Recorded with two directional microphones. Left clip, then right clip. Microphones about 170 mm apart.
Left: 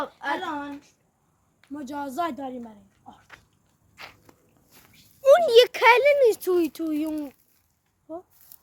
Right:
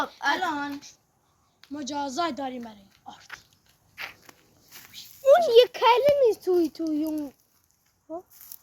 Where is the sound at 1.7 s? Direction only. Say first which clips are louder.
Right 1 dB; 15° left (ahead or behind).